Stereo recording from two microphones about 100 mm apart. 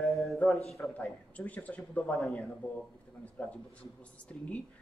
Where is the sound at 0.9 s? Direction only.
15° left (ahead or behind).